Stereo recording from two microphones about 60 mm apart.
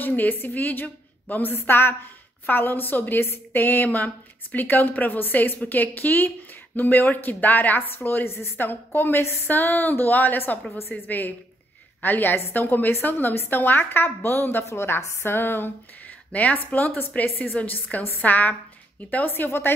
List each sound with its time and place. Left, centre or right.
0.0 s a woman's voice: left
14.6 s a woman's voice: left
16.3 s a woman's voice: left